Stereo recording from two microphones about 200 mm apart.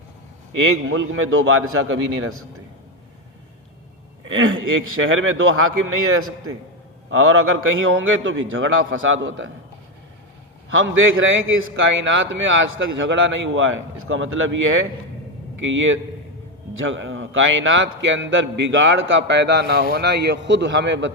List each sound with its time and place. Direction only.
0.5 s a man's voice: 80° right
4.3 s a man's voice: 80° right
10.9 s a man's voice: 75° right (ahead or behind)
11.9 s a man's voice: 65° right (ahead or behind)
15.6 s a man's voice: 70° right (ahead or behind)